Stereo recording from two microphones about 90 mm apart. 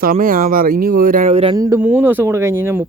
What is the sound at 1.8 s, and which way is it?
Speech, 20° right (ahead or behind).